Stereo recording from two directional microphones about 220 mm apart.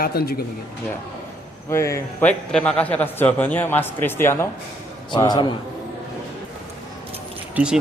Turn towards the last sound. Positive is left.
turn(degrees=-5)  # may be behind; listen again after turning